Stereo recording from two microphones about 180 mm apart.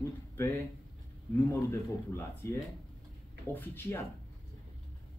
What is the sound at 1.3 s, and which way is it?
Speech, 15° left (ahead or behind).